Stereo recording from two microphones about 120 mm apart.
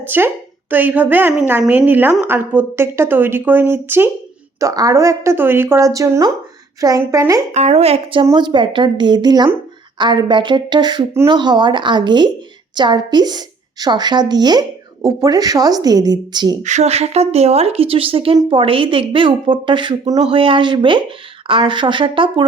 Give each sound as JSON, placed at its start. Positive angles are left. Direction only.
{"t": 0.0, "sound": "a woman's voice", "side_deg": -15}
{"t": 4.6, "sound": "speech", "side_deg": -30}
{"t": 7.5, "sound": "a woman's voice", "side_deg": -65}
{"t": 16.6, "sound": "a woman's voice", "side_deg": -70}